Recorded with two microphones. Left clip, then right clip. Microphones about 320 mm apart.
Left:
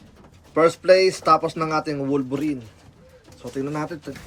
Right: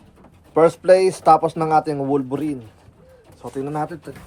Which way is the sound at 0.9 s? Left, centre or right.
Right.